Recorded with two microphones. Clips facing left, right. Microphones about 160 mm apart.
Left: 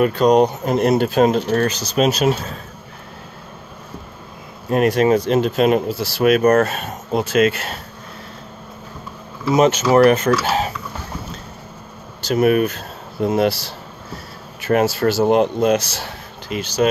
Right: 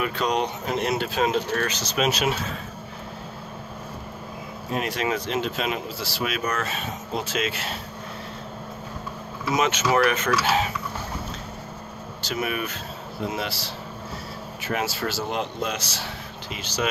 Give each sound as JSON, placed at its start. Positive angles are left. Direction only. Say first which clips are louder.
{"t": 0.0, "sound": "speech", "louder": "left 11 dB", "side_deg": 45}
{"t": 4.6, "sound": "speech", "louder": "left 11 dB", "side_deg": 50}
{"t": 9.5, "sound": "speech", "louder": "left 8 dB", "side_deg": 35}
{"t": 12.3, "sound": "speech", "louder": "left 13 dB", "side_deg": 45}
{"t": 14.6, "sound": "speech", "louder": "left 11 dB", "side_deg": 50}